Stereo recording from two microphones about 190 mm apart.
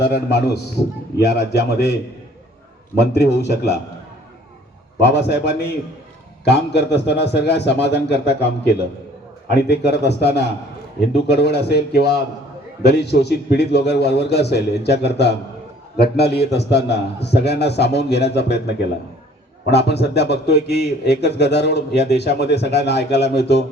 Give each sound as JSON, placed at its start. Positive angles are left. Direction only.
{"t": 0.0, "sound": "a man's voice", "side_deg": 60}
{"t": 3.0, "sound": "a man's voice", "side_deg": 60}
{"t": 4.9, "sound": "a man's voice", "side_deg": 65}
{"t": 12.8, "sound": "a man's voice", "side_deg": 60}
{"t": 19.7, "sound": "a man's voice", "side_deg": 60}